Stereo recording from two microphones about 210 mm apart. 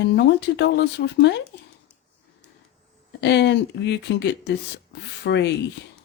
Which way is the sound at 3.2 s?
55° left (ahead or behind).